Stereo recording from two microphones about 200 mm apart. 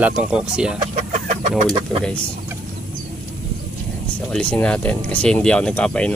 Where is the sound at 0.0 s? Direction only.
5° right (ahead or behind).